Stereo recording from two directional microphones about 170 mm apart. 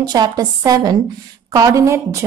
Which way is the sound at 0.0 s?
25° right (ahead or behind).